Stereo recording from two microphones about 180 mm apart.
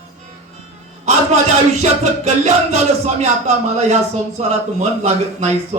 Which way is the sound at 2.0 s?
40° right (ahead or behind).